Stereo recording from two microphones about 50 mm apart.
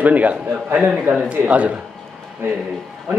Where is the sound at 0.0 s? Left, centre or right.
Right.